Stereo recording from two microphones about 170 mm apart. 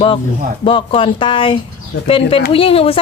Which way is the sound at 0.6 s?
30° left (ahead or behind).